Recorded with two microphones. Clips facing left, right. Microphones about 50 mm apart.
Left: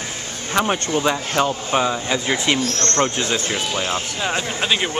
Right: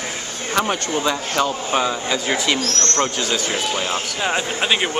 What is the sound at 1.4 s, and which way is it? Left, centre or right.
Speech, left.